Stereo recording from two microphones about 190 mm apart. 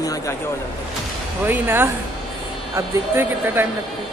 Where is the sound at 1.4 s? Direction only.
10° right (ahead or behind).